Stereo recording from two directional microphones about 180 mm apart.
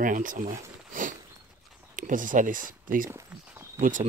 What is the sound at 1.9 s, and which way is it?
Speech, 45° right (ahead or behind).